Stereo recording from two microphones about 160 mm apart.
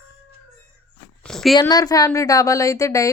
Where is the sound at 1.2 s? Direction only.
5° left (ahead or behind).